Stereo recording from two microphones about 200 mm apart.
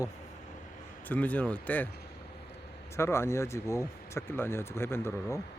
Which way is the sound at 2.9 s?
15° left (ahead or behind).